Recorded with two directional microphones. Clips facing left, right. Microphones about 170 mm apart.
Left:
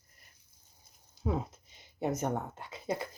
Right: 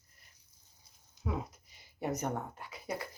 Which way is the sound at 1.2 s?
25° left (ahead or behind).